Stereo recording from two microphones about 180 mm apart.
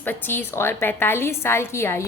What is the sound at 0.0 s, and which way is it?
A woman's voice, 10° left (ahead or behind).